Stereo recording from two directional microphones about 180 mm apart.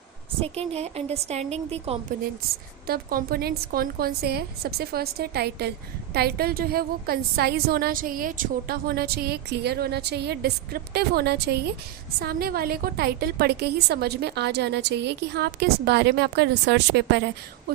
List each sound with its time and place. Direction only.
0.4 s a woman's voice: 35° right (ahead or behind)
2.8 s a woman's voice: 55° right (ahead or behind)